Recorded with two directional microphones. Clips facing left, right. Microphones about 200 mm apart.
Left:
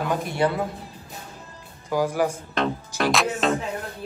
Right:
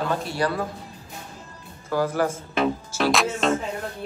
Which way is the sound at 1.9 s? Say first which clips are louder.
Even; 15° left (ahead or behind).